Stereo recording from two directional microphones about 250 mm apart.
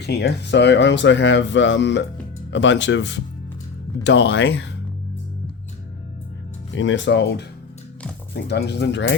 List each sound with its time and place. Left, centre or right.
0.0 s speech: left
6.7 s speech: left